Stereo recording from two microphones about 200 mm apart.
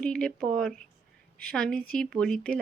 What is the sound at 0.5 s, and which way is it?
A woman's voice, centre (ahead or behind).